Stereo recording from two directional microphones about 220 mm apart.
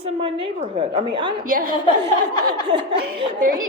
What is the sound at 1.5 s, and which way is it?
Speech, 40° right (ahead or behind).